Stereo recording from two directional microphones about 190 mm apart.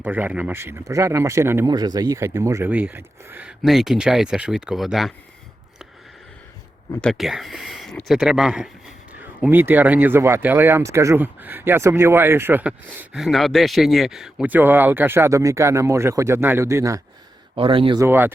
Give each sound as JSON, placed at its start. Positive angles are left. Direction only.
{"t": 0.0, "sound": "speech", "side_deg": -10}
{"t": 7.0, "sound": "speech", "side_deg": 0}
{"t": 17.5, "sound": "speech", "side_deg": -25}
{"t": 18.0, "sound": "speech", "side_deg": -10}